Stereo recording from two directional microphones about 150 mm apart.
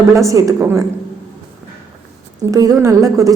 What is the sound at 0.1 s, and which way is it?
Speech, 20° right (ahead or behind).